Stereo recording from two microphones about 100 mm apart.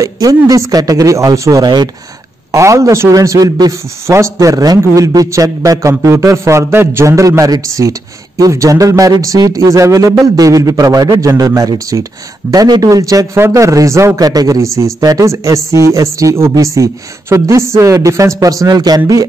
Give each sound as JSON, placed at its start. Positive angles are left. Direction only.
{"t": 0.0, "sound": "a man's voice", "side_deg": -35}
{"t": 2.5, "sound": "a man's voice", "side_deg": -30}